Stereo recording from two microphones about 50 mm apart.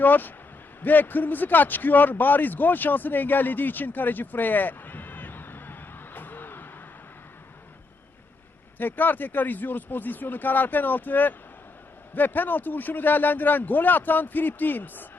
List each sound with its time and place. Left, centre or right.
0.0 s a man's voice: left
6.1 s a sound: left
8.8 s a man's voice: left